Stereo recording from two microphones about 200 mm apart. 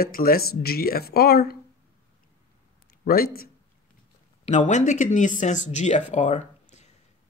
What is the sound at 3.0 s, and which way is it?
Speech, 50° left (ahead or behind).